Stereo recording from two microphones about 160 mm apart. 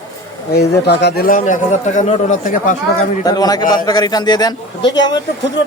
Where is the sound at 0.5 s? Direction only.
90° left; by 2.7 s 55° left (ahead or behind).